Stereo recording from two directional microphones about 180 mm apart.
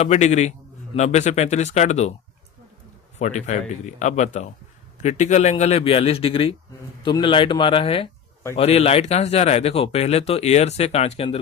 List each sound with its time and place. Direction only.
0.0 s speech: 40° left (ahead or behind)
3.2 s speech: 40° left (ahead or behind)